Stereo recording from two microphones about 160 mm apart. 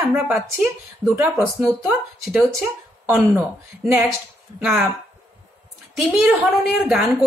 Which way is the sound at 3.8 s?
Centre (ahead or behind).